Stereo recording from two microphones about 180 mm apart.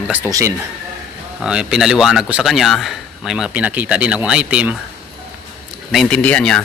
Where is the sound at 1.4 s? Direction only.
5° right (ahead or behind).